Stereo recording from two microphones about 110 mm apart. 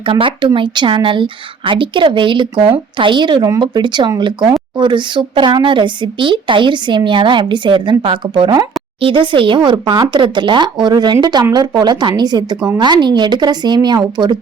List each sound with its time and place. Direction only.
0.0 s a woman's voice: 50° right (ahead or behind)